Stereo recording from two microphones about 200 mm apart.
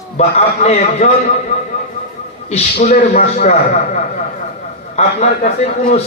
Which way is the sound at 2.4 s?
35° left (ahead or behind).